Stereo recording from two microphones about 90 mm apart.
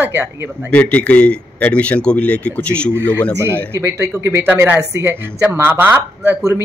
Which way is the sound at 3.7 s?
30° right (ahead or behind).